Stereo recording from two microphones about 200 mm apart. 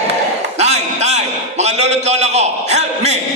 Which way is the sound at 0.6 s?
35° right (ahead or behind).